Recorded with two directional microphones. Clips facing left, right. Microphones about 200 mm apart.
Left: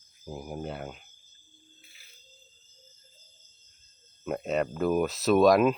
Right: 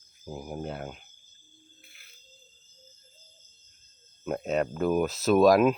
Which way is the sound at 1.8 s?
55° right (ahead or behind).